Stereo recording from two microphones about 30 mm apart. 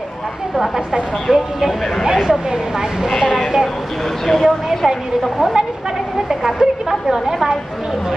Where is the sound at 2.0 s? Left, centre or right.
Centre.